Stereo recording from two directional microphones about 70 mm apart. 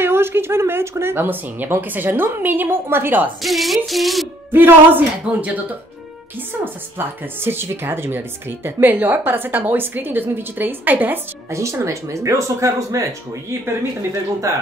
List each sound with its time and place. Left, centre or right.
0.0 s speech: right
3.4 s a sound: centre
4.5 s a woman's voice: right
11.5 s speech: right
14.5 s speech: right